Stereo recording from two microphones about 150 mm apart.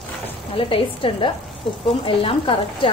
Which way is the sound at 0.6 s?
35° left (ahead or behind).